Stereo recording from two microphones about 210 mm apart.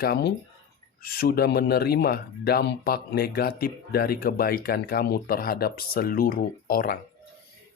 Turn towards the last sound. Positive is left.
turn(degrees=45)  # may be behind; listen again after turning